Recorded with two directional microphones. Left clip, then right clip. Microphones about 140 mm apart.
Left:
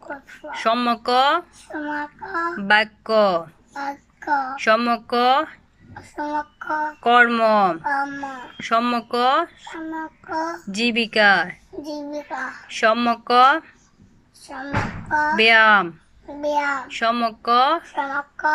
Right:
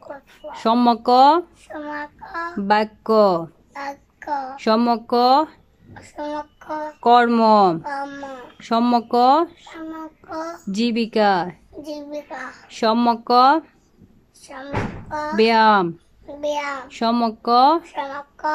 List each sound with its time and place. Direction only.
0.5 s speech: 35° right (ahead or behind)
2.4 s a child's voice: 25° right (ahead or behind)
4.3 s speech: 15° right (ahead or behind)
4.6 s a child's voice: 35° right (ahead or behind)
12.6 s a child's voice: 30° right (ahead or behind)
15.0 s a child's voice: 25° right (ahead or behind)